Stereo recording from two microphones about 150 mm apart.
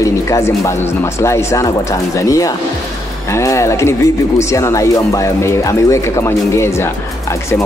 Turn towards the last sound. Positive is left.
turn(degrees=15)  # may be behind; listen again after turning